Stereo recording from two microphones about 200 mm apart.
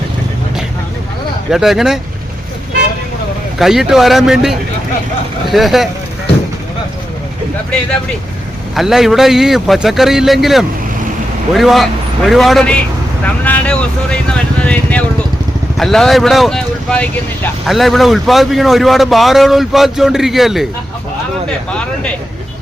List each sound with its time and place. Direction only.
1.5 s speech: centre (ahead or behind)
3.6 s speech: centre (ahead or behind)
8.7 s speech: centre (ahead or behind)
13.4 s vehicle: 5° left (ahead or behind)
15.8 s speech: centre (ahead or behind)